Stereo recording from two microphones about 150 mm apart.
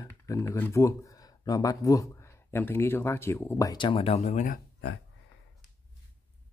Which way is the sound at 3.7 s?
35° left (ahead or behind).